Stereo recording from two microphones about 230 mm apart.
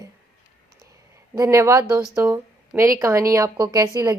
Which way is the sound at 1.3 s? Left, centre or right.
Centre.